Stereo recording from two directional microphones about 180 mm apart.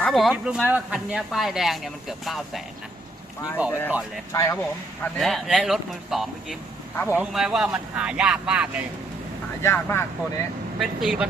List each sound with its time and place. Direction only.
0.0 s speech: centre (ahead or behind)
3.7 s speech: 10° left (ahead or behind)
5.1 s speech: centre (ahead or behind)
9.6 s speech: 15° left (ahead or behind)
10.8 s speech: centre (ahead or behind)